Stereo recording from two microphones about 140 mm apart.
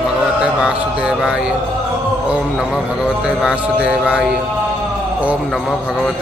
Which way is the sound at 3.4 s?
5° right (ahead or behind).